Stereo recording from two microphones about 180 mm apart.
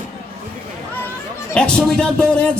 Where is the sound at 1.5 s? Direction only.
5° left (ahead or behind).